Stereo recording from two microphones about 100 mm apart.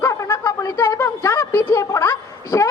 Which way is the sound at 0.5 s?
40° left (ahead or behind).